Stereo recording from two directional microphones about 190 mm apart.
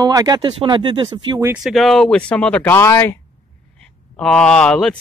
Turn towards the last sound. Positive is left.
turn(degrees=5)  # may be behind; listen again after turning